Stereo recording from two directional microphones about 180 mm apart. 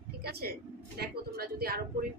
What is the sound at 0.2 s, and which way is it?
A woman's voice, 60° right (ahead or behind).